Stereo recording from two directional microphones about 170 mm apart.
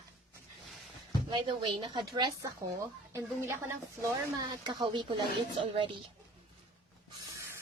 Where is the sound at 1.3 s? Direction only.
30° right (ahead or behind).